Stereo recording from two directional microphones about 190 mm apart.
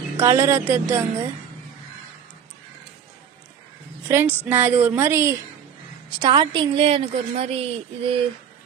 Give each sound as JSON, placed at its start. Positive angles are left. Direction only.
{"t": 0.2, "sound": "a woman's voice", "side_deg": -15}
{"t": 4.1, "sound": "a woman's voice", "side_deg": -10}